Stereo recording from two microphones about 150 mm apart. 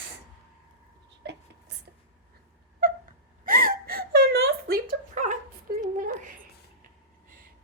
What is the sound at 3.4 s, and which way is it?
Whimper, 70° right (ahead or behind).